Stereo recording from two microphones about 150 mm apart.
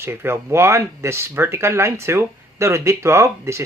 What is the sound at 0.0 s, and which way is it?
Speech, 15° right (ahead or behind).